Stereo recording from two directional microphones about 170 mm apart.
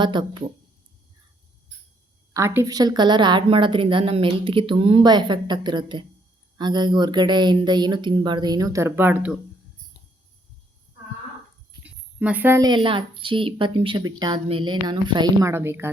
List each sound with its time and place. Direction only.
0.0 s a woman's voice: 25° right (ahead or behind)
2.3 s a woman's voice: 15° right (ahead or behind)
11.8 s a sound: 10° right (ahead or behind)
12.6 s a woman's voice: 30° right (ahead or behind)